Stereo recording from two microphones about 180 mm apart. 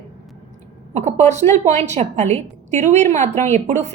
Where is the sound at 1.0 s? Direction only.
40° right (ahead or behind).